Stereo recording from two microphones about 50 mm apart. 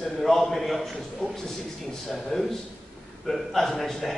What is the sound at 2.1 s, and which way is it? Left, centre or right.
A man's voice, centre.